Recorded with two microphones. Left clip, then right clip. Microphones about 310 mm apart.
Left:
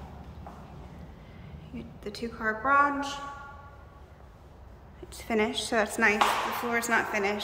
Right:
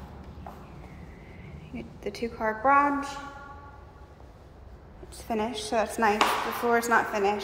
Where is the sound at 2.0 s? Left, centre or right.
Centre.